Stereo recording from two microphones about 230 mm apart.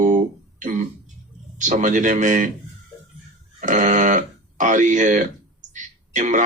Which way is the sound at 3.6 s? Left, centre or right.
Right.